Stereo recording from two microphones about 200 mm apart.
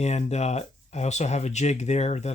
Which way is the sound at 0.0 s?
35° left (ahead or behind).